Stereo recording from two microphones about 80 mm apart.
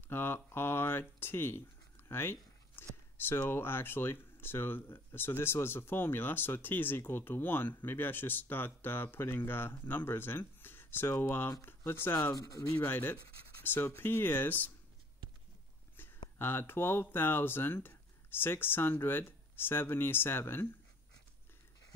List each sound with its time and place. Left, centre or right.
0.1 s speech: left
2.0 s a sound: left
3.2 s speech: left
12.2 s speech: left
12.8 s speech: left
16.3 s speech: left